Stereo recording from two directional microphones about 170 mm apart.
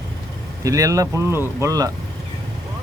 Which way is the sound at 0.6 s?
20° right (ahead or behind).